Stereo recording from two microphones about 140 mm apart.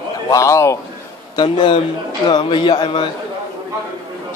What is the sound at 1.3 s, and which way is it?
A man's voice, 35° left (ahead or behind).